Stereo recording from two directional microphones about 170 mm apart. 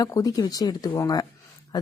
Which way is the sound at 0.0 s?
20° left (ahead or behind).